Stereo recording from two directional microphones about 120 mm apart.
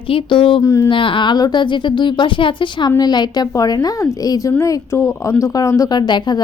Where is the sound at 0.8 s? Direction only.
45° left (ahead or behind).